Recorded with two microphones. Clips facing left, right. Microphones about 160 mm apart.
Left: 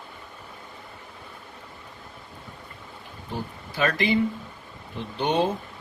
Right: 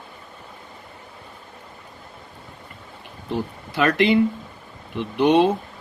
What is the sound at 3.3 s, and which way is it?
A man's voice, 65° right (ahead or behind).